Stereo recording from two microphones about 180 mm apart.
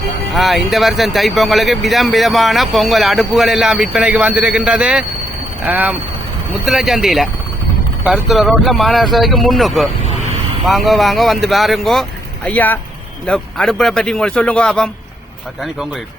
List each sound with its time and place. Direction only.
0.3 s speech: centre (ahead or behind)